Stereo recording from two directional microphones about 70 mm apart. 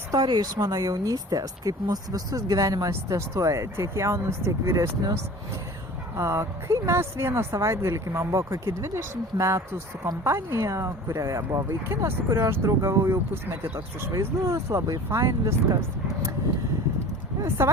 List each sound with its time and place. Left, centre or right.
0.1 s speech: right
6.1 s speech: right
17.6 s speech: right